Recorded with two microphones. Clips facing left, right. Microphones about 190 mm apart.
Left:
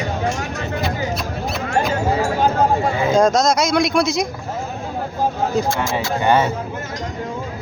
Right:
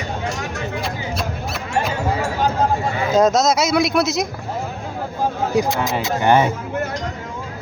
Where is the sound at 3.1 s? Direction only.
5° right (ahead or behind).